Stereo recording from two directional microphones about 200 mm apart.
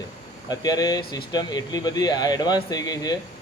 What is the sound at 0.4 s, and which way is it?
Speech, 20° left (ahead or behind).